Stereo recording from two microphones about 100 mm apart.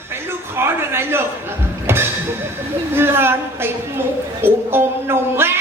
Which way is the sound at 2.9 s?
25° right (ahead or behind).